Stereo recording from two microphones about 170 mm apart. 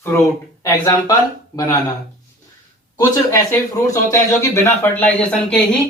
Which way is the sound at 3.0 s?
20° left (ahead or behind).